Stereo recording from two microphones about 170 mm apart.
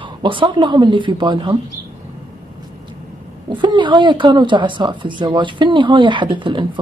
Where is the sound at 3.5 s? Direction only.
25° right (ahead or behind).